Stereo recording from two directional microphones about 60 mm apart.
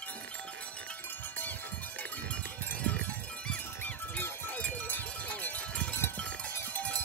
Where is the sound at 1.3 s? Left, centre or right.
Left.